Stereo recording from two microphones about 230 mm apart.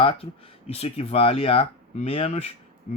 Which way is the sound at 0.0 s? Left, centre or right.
Left.